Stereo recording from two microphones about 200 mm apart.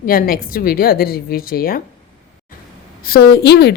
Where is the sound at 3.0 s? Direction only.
50° left (ahead or behind).